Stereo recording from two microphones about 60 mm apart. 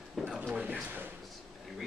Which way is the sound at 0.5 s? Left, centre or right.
Right.